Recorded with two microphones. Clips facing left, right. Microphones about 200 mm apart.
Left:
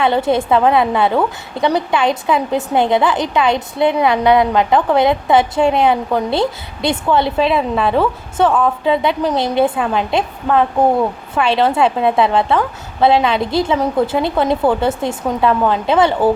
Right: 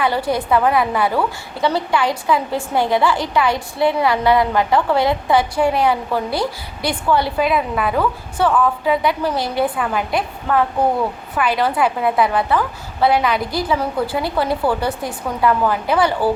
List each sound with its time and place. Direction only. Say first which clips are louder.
0.0 s a woman's voice: left 4 dB; 25° left (ahead or behind)